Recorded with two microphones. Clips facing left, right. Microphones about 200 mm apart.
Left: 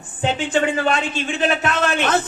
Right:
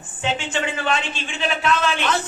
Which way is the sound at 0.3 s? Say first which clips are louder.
Left 6 dB; 40° left (ahead or behind).